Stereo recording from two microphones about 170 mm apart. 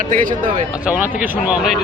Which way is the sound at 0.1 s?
55° right (ahead or behind).